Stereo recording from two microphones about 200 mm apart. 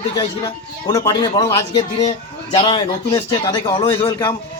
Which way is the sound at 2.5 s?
25° left (ahead or behind).